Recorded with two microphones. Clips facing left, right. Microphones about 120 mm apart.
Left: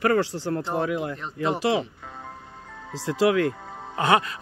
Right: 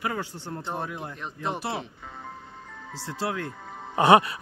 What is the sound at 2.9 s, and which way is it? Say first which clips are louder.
Speech: left 10 dB; 90° left.